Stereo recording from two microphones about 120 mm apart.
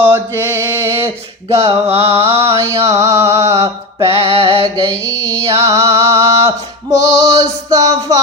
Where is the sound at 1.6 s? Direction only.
55° right (ahead or behind).